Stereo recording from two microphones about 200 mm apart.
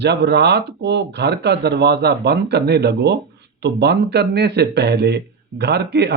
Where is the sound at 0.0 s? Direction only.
55° right (ahead or behind).